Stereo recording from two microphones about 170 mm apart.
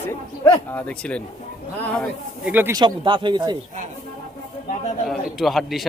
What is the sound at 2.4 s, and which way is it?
Speech, 10° right (ahead or behind).